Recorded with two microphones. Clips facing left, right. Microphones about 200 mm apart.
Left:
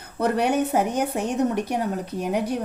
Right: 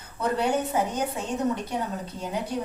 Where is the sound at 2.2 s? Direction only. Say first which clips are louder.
Left 6 dB; 65° left (ahead or behind).